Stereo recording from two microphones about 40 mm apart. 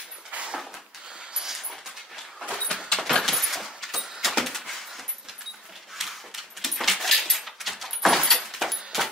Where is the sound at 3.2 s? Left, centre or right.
Centre.